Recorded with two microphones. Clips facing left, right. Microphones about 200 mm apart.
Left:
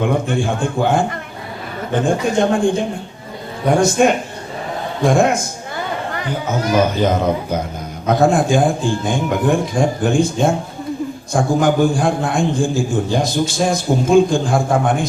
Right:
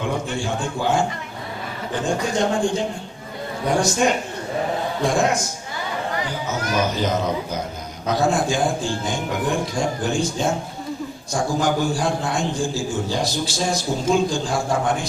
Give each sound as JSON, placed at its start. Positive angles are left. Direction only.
{"t": 0.0, "sound": "speech", "side_deg": 55}
{"t": 4.0, "sound": "a man's voice", "side_deg": 55}